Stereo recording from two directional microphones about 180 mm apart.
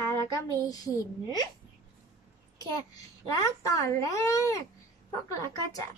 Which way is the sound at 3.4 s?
15° left (ahead or behind).